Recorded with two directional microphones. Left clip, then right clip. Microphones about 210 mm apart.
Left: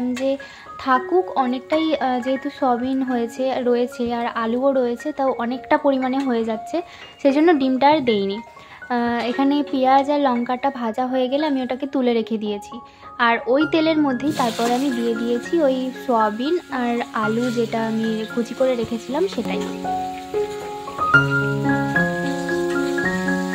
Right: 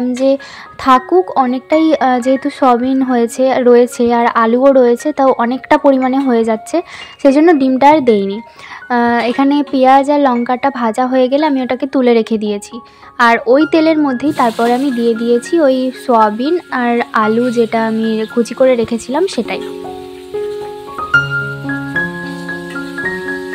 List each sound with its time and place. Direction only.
0.8 s speech: 35° right (ahead or behind)